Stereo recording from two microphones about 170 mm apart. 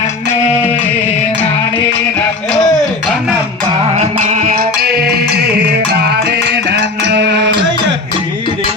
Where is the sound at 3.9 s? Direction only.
40° right (ahead or behind); by 5.5 s 70° right (ahead or behind).